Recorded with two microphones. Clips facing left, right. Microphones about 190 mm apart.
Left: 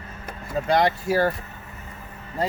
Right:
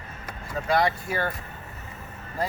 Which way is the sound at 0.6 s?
30° left (ahead or behind).